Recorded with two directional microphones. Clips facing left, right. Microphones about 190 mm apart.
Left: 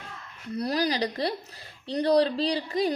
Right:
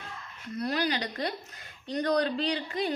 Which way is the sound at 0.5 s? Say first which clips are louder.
Left 3 dB; 35° left (ahead or behind).